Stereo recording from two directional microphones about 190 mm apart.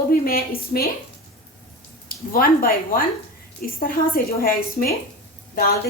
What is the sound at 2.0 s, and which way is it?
A woman's voice, 50° left (ahead or behind).